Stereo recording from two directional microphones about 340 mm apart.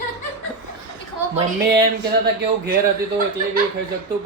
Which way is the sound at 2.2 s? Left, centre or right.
Right.